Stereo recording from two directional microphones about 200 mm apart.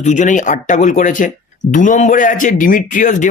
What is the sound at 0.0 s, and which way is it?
A man's voice, 40° left (ahead or behind).